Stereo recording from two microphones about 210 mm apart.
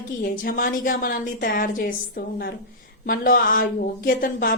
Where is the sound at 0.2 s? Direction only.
40° left (ahead or behind).